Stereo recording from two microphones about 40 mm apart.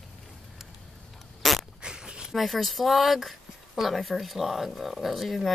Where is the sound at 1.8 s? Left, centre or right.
Right.